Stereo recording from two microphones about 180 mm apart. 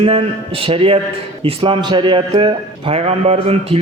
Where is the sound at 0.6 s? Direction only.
30° right (ahead or behind).